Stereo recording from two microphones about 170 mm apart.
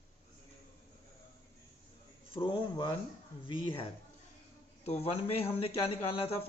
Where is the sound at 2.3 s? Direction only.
30° left (ahead or behind).